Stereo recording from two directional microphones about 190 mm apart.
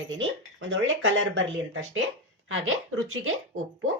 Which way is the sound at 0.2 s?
85° right.